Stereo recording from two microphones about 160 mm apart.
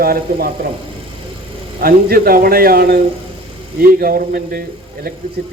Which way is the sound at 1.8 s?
70° right (ahead or behind).